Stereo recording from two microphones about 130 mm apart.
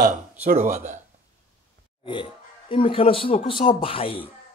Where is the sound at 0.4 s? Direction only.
65° right (ahead or behind).